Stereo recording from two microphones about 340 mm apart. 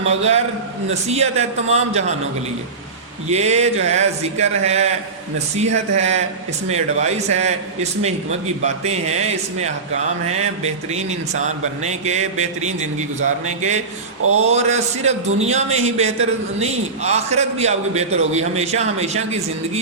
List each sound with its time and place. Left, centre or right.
0.0 s a man's voice: centre
3.2 s a man's voice: centre
8.6 s a man's voice: centre
14.2 s a sound: right
14.5 s a man's voice: centre